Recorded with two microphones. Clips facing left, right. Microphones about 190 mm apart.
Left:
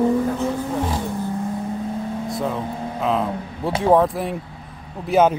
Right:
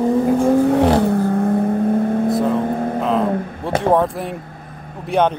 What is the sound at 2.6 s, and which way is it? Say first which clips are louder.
Vehicle: right 8 dB; 55° right (ahead or behind).